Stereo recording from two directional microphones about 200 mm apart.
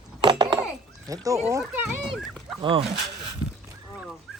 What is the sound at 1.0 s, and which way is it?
Speech, 15° right (ahead or behind).